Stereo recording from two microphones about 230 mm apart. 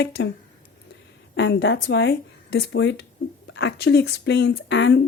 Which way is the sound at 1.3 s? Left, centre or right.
Left.